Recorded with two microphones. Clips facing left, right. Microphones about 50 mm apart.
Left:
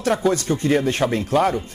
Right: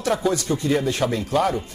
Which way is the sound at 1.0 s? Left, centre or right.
Centre.